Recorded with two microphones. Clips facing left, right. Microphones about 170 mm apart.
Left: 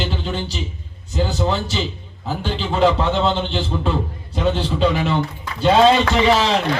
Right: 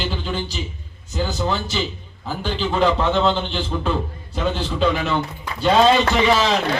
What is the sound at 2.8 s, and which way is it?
A man's voice, 20° left (ahead or behind).